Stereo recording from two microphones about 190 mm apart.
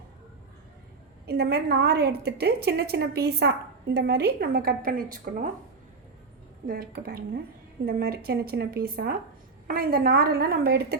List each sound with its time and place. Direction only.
1.3 s a woman's voice: 55° right (ahead or behind)
6.7 s a woman's voice: 50° right (ahead or behind)